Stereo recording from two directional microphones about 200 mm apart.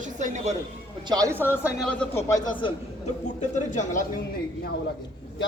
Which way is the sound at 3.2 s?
40° left (ahead or behind).